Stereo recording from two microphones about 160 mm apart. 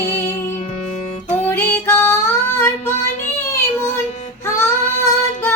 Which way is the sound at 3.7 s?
15° left (ahead or behind).